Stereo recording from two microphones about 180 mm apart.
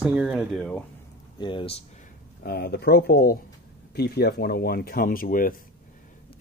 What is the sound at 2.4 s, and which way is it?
Speech, 60° left (ahead or behind).